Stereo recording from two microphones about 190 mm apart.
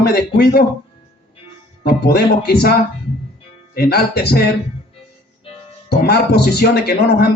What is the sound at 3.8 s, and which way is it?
Speech, 55° left (ahead or behind).